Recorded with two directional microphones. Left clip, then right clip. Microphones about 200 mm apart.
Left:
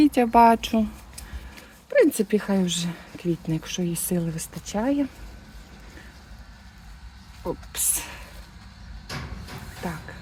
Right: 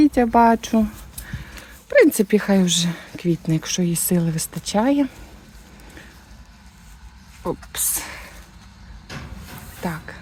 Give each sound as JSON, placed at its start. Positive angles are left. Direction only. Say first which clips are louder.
{"t": 0.0, "sound": "speech", "louder": "right 1 dB", "side_deg": -20}
{"t": 1.3, "sound": "speech", "louder": "right 6 dB", "side_deg": -40}
{"t": 7.4, "sound": "speech", "louder": "right 4 dB", "side_deg": -30}
{"t": 9.1, "sound": "vehicle", "louder": "left 1 dB", "side_deg": 55}
{"t": 9.8, "sound": "speech", "louder": "right 5 dB", "side_deg": -40}